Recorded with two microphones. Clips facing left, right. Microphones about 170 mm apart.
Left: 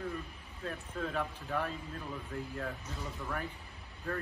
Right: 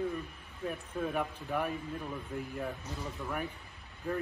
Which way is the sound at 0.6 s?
15° right (ahead or behind).